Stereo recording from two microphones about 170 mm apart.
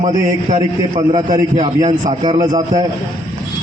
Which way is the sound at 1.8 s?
35° right (ahead or behind).